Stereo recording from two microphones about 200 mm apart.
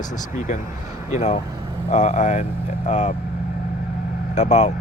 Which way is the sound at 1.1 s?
35° left (ahead or behind).